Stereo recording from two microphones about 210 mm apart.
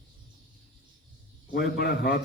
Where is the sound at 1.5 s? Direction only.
50° left (ahead or behind).